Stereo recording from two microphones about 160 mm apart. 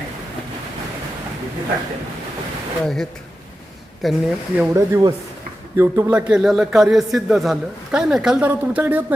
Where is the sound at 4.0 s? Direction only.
Centre (ahead or behind).